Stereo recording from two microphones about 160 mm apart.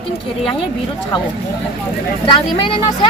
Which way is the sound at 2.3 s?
30° left (ahead or behind).